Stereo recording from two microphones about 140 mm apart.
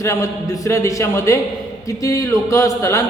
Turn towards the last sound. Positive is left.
turn(degrees=20)  # may be behind; listen again after turning